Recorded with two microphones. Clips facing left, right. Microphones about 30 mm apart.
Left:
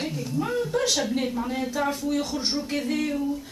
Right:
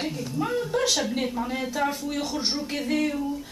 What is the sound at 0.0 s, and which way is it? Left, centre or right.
A woman's voice, centre.